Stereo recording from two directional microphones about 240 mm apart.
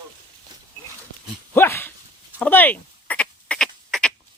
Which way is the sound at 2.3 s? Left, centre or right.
Centre.